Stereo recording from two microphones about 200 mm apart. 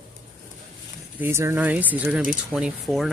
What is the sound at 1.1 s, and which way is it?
Speech, 10° right (ahead or behind).